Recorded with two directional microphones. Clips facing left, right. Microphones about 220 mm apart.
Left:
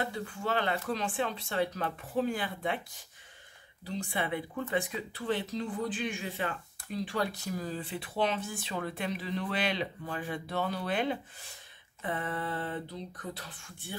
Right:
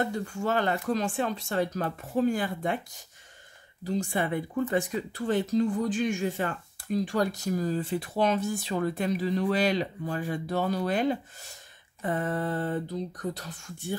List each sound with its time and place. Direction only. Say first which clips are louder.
0.0 s speech: right 5 dB; 45° right (ahead or behind)
3.8 s speech: right 6 dB; 45° right (ahead or behind)